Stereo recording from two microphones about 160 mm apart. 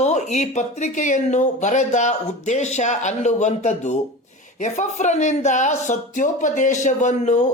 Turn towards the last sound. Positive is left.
turn(degrees=50)  # may be behind; listen again after turning